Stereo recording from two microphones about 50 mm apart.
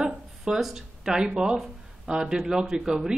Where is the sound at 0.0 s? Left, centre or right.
Centre.